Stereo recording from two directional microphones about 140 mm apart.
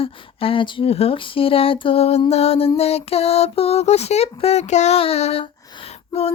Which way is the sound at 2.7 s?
45° left (ahead or behind).